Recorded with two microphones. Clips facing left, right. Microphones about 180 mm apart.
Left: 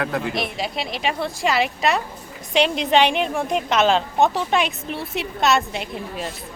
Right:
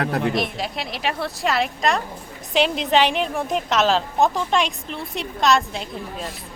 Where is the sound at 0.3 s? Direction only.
Centre (ahead or behind).